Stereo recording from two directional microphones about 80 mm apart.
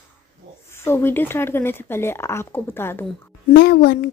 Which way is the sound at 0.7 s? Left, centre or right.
Left.